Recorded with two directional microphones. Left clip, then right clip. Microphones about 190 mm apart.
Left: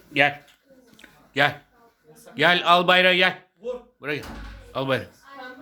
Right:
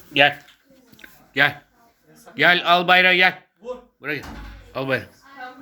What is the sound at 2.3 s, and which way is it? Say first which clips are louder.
A man's voice: right 2 dB; 15° left (ahead or behind).